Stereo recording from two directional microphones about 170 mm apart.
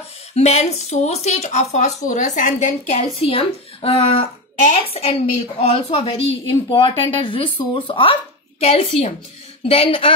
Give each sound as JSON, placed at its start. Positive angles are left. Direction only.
{"t": 0.3, "sound": "a woman's voice", "side_deg": 40}